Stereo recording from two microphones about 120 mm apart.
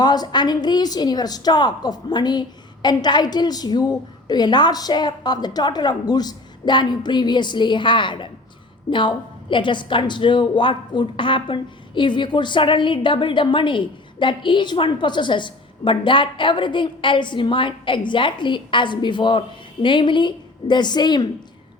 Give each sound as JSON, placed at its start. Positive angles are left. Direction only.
{"t": 0.0, "sound": "a woman's voice", "side_deg": 35}